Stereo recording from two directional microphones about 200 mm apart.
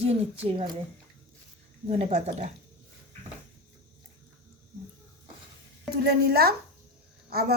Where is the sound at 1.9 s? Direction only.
30° right (ahead or behind).